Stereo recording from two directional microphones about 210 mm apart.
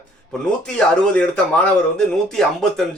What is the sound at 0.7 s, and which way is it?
Speech, 5° left (ahead or behind).